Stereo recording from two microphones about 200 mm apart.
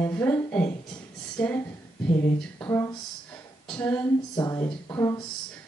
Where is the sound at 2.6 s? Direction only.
15° left (ahead or behind).